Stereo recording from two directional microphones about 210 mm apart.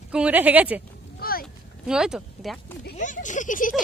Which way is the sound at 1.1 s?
45° left (ahead or behind).